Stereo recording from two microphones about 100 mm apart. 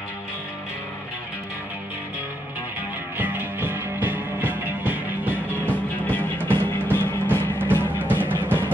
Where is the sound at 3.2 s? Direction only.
20° right (ahead or behind).